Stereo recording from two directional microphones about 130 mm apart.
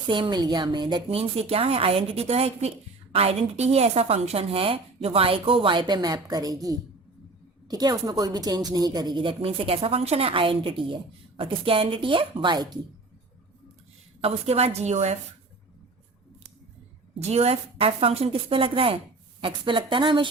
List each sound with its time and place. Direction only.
0.1 s speech: 35° right (ahead or behind)
1.1 s a woman's voice: 50° right (ahead or behind)
14.2 s a woman's voice: 50° right (ahead or behind)
17.2 s a woman's voice: 55° right (ahead or behind); by 20.3 s 40° right (ahead or behind)